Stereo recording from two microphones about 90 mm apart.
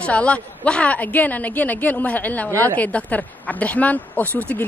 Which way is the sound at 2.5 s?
35° right (ahead or behind).